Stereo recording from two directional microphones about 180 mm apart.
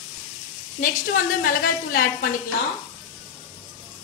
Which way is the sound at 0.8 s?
50° left (ahead or behind).